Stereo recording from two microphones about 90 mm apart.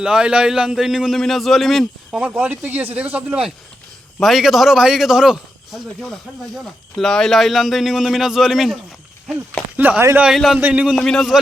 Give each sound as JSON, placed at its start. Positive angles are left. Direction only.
{"t": 0.0, "sound": "a man's voice", "side_deg": -10}
{"t": 2.2, "sound": "speech", "side_deg": -20}
{"t": 4.2, "sound": "a man's voice", "side_deg": 0}
{"t": 9.7, "sound": "speech", "side_deg": -20}
{"t": 10.3, "sound": "a man's voice", "side_deg": 0}
{"t": 10.6, "sound": "speech", "side_deg": -15}
{"t": 10.9, "sound": "a man's voice", "side_deg": 5}